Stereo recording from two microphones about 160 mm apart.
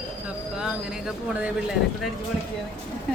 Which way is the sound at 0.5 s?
5° right (ahead or behind).